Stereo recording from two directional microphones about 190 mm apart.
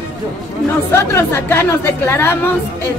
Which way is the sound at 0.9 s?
10° left (ahead or behind).